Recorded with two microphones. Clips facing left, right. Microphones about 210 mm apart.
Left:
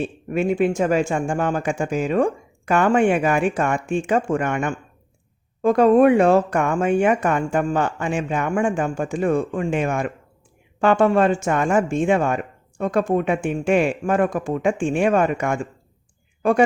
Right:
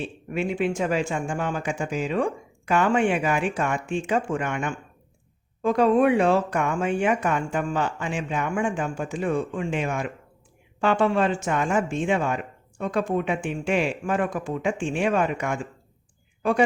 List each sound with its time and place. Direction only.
0.0 s speech: 45° left (ahead or behind)